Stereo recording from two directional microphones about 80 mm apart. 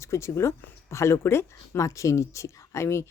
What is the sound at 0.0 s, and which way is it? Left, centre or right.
Speech, left.